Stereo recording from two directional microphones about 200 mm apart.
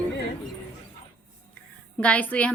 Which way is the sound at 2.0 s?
5° left (ahead or behind).